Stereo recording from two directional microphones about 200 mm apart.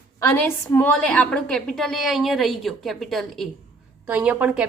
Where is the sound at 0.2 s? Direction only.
10° left (ahead or behind).